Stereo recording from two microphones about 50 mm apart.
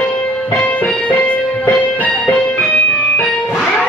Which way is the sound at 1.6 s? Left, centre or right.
Left.